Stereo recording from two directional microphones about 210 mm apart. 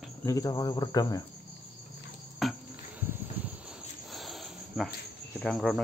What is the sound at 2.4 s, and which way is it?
Cricket, centre (ahead or behind).